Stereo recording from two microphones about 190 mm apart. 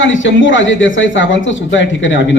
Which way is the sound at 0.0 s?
80° left.